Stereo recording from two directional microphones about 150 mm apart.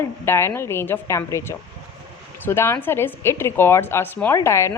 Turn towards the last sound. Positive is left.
turn(degrees=20)  # may be behind; listen again after turning